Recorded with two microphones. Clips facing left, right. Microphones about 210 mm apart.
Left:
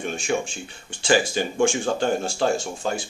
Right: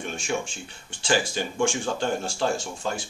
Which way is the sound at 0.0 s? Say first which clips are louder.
Left 4 dB; 15° left (ahead or behind).